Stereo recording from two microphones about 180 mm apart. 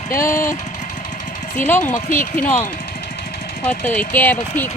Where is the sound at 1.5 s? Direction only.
10° left (ahead or behind).